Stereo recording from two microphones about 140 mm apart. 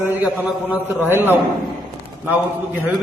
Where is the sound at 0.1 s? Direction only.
15° right (ahead or behind).